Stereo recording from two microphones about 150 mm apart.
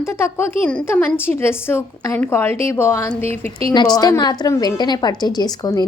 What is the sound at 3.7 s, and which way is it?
A woman's voice, 30° left (ahead or behind).